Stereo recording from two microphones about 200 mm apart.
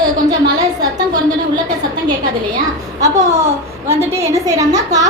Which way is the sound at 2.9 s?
15° right (ahead or behind).